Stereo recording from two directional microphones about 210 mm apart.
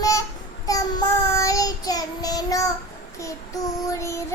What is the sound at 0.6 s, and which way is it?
Child singing, 15° left (ahead or behind).